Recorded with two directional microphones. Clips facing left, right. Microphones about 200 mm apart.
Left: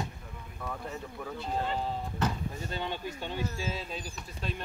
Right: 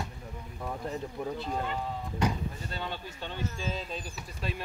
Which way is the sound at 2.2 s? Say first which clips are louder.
Right 2 dB; 15° right (ahead or behind).